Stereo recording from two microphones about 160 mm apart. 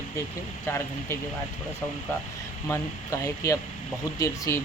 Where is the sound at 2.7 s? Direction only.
20° left (ahead or behind).